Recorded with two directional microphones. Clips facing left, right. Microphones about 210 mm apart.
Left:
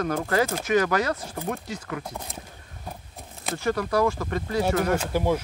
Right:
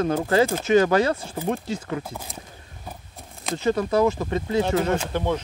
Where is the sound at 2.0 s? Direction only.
Centre (ahead or behind).